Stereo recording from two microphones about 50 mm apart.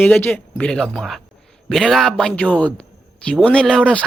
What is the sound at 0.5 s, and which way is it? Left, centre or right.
Speech, centre.